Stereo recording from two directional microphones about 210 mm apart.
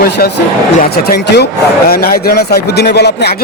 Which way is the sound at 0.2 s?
50° left (ahead or behind).